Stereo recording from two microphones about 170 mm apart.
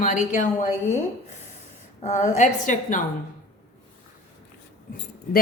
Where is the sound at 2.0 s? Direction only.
45° left (ahead or behind).